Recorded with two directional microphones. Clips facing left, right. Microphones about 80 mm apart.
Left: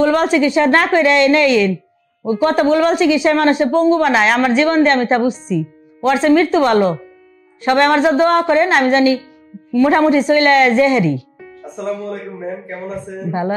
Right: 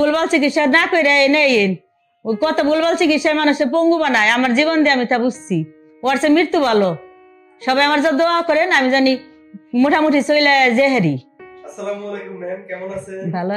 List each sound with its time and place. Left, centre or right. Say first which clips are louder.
0.0 s a woman's voice: left 2 dB; left
11.7 s a sound: left 2 dB; left
13.3 s a woman's voice: left 2 dB; left